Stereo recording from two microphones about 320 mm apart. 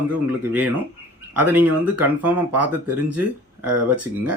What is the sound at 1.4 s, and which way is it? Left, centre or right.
Speech, centre.